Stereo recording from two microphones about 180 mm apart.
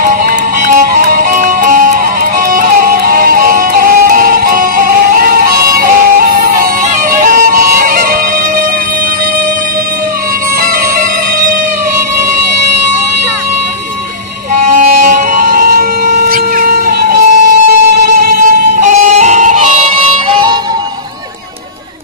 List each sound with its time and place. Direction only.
0.7 s music: 50° right (ahead or behind)
14.8 s music: 50° right (ahead or behind)
20.2 s music: 25° right (ahead or behind)